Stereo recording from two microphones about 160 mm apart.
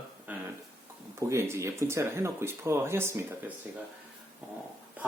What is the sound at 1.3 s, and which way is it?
Speech, 15° right (ahead or behind).